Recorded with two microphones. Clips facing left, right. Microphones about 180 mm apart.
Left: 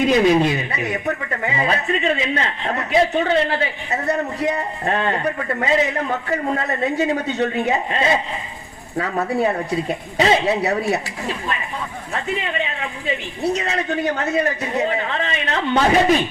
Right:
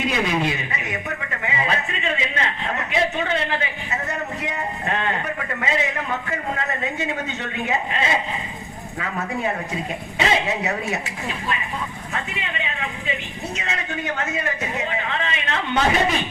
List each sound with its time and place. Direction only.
0.1 s a woman's voice: 35° left (ahead or behind)
13.4 s a woman's voice: 35° left (ahead or behind)